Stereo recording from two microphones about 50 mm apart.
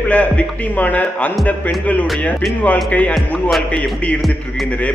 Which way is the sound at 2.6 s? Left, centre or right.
Left.